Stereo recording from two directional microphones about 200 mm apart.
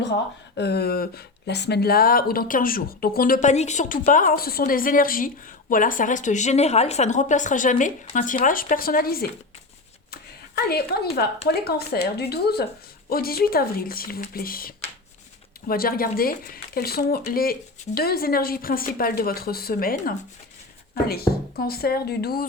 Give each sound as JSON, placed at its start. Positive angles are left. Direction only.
{"t": 0.5, "sound": "speech", "side_deg": 55}
{"t": 10.1, "sound": "a sound", "side_deg": 50}
{"t": 11.2, "sound": "speech", "side_deg": 55}